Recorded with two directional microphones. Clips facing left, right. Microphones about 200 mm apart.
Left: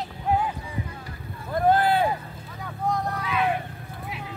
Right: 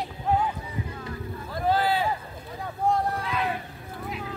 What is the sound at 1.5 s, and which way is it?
Vehicle, 55° left (ahead or behind).